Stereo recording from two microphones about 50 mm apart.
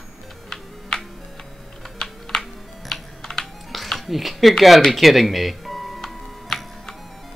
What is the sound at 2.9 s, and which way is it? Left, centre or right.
Typing, centre.